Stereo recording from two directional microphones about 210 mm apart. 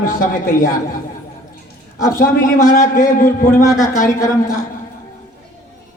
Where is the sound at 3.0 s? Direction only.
40° left (ahead or behind).